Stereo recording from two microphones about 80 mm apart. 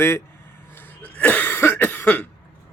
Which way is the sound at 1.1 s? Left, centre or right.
Centre.